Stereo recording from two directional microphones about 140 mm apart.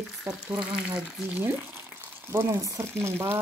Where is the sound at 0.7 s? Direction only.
5° right (ahead or behind).